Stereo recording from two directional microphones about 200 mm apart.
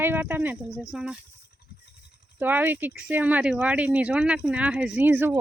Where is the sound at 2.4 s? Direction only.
10° right (ahead or behind).